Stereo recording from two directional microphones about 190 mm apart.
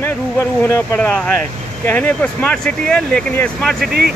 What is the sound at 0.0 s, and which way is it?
Speech, 15° left (ahead or behind).